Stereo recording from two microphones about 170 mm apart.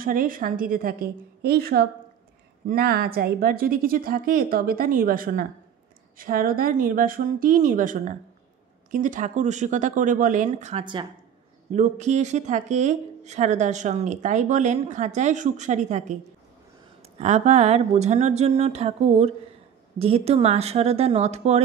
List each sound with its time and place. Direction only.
0.0 s a woman's voice: 55° right (ahead or behind)
10.8 s speech: 30° right (ahead or behind)
11.7 s speech: 45° right (ahead or behind)
17.2 s speech: 40° right (ahead or behind)